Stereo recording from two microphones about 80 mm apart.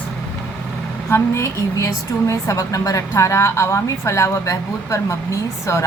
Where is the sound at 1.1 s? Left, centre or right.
Left.